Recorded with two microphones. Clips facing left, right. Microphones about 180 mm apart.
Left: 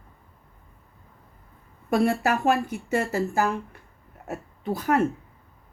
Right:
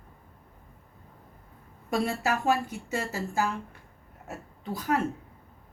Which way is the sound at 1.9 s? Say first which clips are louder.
Left 6 dB; 60° left (ahead or behind).